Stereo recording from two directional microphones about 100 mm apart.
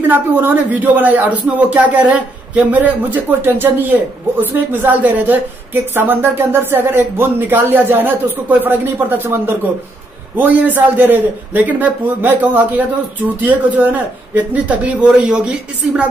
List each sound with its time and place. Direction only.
0.1 s a woman's voice: 15° right (ahead or behind)